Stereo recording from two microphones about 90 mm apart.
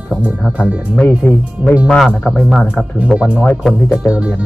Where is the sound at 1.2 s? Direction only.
20° left (ahead or behind).